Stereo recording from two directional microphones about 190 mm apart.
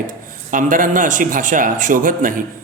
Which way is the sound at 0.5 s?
45° right (ahead or behind).